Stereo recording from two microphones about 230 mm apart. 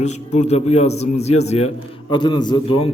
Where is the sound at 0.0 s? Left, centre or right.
Left.